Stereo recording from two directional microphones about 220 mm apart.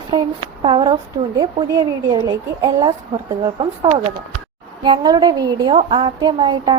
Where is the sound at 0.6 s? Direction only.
20° right (ahead or behind).